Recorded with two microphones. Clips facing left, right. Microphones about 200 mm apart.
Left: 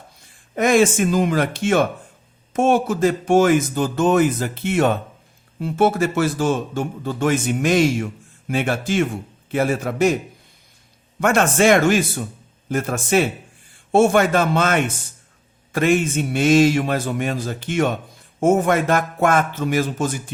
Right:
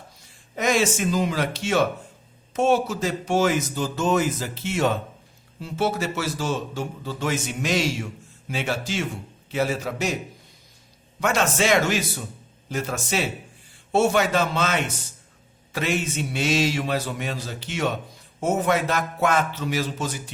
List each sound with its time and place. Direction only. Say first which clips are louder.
0.5 s speech: left 6 dB; 55° left (ahead or behind)
11.2 s speech: left 6 dB; 55° left (ahead or behind)